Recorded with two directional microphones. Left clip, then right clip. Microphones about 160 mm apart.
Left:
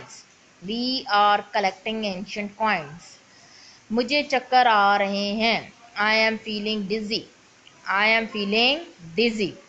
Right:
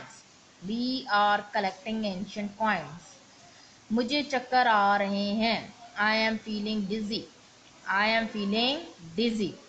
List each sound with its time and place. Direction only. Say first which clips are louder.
0.7 s a woman's voice: left 5 dB; 40° left (ahead or behind)
3.9 s a woman's voice: left 6 dB; 35° left (ahead or behind)